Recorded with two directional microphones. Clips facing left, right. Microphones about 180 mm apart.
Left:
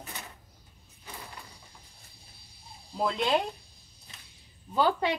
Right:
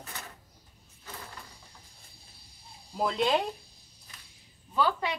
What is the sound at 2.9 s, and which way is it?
Speech, centre (ahead or behind).